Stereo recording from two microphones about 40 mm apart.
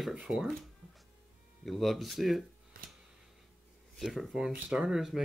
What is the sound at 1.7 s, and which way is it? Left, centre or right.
Speech, centre.